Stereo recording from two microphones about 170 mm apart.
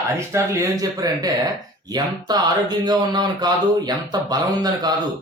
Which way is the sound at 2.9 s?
25° right (ahead or behind).